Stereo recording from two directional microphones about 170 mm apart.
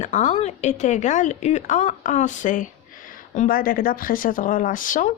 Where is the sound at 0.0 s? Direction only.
45° left (ahead or behind).